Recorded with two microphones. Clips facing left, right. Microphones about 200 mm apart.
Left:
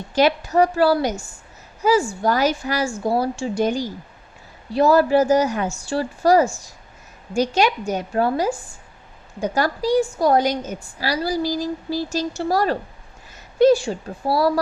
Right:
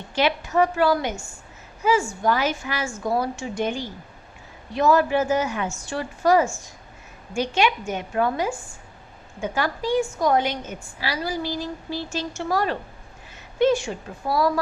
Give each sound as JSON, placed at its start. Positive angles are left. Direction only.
{"t": 0.1, "sound": "a woman's voice", "side_deg": 40}